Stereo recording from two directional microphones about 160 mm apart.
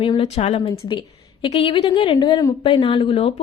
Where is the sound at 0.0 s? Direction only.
35° left (ahead or behind).